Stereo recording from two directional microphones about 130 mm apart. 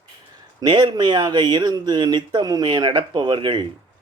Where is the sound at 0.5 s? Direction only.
35° right (ahead or behind).